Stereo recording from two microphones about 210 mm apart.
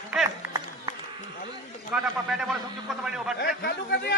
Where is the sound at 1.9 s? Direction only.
Centre (ahead or behind).